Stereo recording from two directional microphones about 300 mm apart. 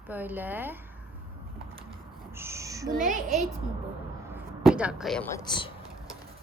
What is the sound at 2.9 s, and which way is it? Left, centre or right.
Speech, right.